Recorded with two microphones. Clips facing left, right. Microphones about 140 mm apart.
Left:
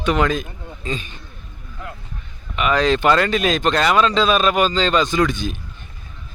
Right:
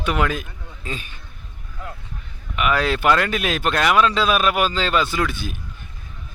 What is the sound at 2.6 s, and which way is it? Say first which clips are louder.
Speech: left 3 dB; 5° right (ahead or behind).